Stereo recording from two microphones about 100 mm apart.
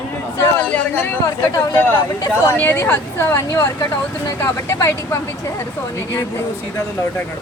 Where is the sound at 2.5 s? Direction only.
20° left (ahead or behind).